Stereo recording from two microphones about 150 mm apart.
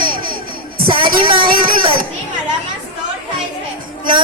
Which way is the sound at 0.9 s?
35° right (ahead or behind).